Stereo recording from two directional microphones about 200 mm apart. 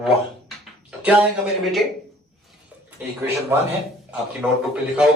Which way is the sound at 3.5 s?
10° right (ahead or behind).